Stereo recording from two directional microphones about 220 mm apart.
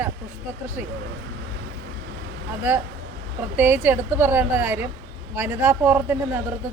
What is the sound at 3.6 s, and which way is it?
A woman's voice, 10° right (ahead or behind).